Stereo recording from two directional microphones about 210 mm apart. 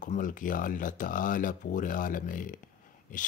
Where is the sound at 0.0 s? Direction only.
40° left (ahead or behind).